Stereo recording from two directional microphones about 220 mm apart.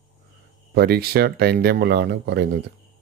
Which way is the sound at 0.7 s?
45° right (ahead or behind).